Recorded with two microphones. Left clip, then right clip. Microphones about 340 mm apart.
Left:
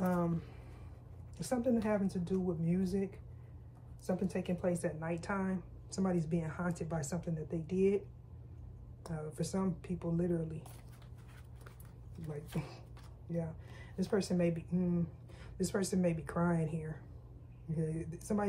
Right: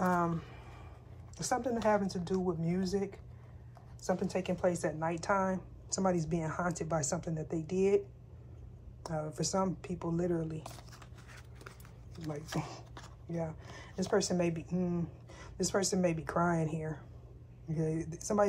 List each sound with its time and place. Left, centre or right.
0.0 s a sound: right
1.4 s speech: right
9.0 s speech: right
12.3 s speech: right